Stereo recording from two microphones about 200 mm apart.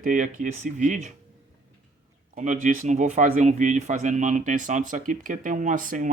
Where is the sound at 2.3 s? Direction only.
40° right (ahead or behind).